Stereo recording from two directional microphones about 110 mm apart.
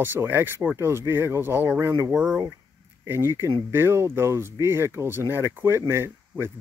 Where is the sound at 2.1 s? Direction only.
10° right (ahead or behind).